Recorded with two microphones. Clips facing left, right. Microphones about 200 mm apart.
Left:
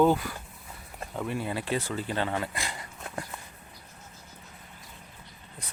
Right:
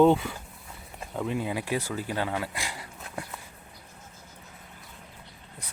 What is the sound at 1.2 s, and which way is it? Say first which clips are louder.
Speech: right 1 dB; 15° right (ahead or behind).